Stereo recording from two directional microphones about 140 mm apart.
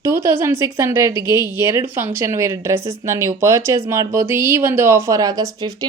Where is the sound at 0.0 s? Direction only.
20° right (ahead or behind).